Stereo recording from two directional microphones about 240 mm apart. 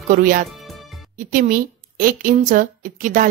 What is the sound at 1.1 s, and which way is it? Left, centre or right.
A woman's voice, right.